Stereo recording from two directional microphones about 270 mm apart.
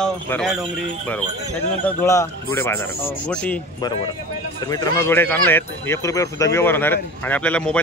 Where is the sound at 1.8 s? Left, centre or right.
Centre.